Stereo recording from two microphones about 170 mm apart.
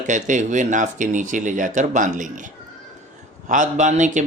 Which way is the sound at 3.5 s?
50° right (ahead or behind).